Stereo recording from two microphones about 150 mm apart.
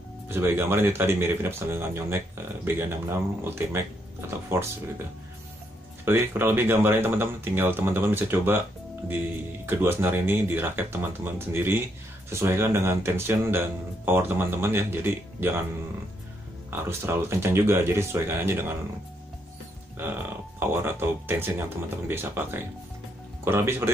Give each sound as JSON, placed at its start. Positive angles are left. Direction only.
{"t": 0.3, "sound": "speech", "side_deg": -15}
{"t": 6.0, "sound": "speech", "side_deg": -15}
{"t": 9.7, "sound": "speech", "side_deg": -15}
{"t": 16.7, "sound": "speech", "side_deg": -15}
{"t": 20.0, "sound": "speech", "side_deg": -15}